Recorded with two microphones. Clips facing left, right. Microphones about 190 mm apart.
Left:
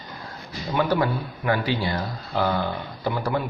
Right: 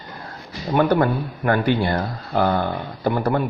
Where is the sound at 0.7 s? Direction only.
50° right (ahead or behind).